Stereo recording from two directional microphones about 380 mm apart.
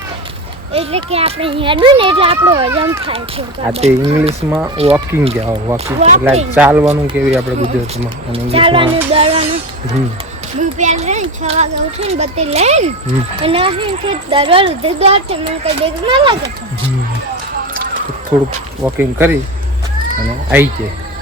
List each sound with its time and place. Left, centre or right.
0.7 s a child's voice: centre
6.6 s speech: centre
6.8 s a child's voice: centre
10.6 s a child's voice: centre
18.8 s speech: centre